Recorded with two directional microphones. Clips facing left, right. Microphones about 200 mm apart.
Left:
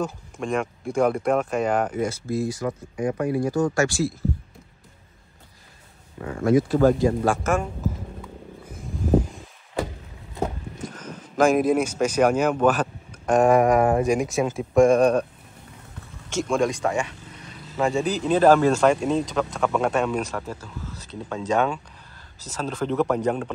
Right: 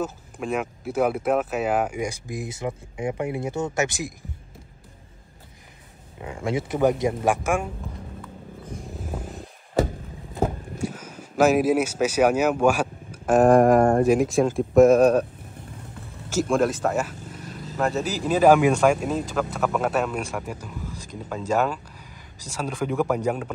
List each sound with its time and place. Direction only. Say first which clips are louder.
0.0 s speech: left 1 dB; 5° right (ahead or behind)
6.2 s speech: left 7 dB; 20° right (ahead or behind)
8.7 s a sound: left 7 dB; centre (ahead or behind)
10.4 s speech: right 3 dB; 10° right (ahead or behind)
16.3 s speech: right 1 dB; 5° right (ahead or behind)